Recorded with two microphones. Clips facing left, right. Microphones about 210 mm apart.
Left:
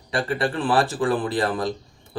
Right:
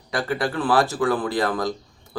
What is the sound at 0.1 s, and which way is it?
Speech, 30° left (ahead or behind).